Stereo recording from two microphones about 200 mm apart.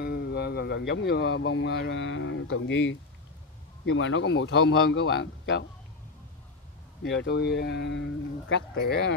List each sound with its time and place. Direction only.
0.0 s speech: 55° left (ahead or behind)
7.0 s speech: 60° left (ahead or behind)